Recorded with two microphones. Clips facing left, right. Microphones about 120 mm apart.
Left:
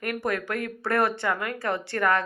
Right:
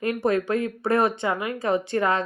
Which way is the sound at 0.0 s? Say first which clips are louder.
Right 6 dB; 25° right (ahead or behind).